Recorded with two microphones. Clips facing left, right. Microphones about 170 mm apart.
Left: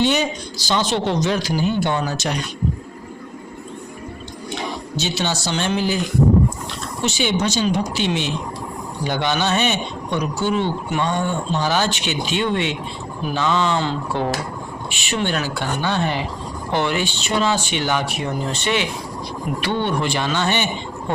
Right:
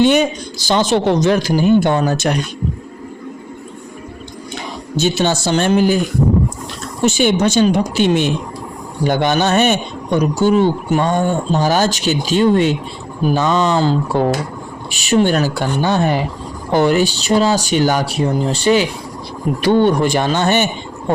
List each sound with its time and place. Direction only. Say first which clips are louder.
0.0 s a man's voice: right 6 dB; 50° right (ahead or behind)
4.9 s a man's voice: right 8 dB; 50° right (ahead or behind)
7.0 s a man's voice: right 7 dB; 50° right (ahead or behind)